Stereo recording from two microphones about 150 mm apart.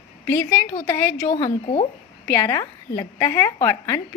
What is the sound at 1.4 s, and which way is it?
Speech, 45° left (ahead or behind).